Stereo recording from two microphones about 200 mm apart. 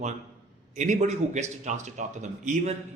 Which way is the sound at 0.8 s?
35° right (ahead or behind).